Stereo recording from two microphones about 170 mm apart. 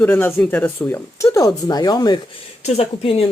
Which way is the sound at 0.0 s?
10° left (ahead or behind).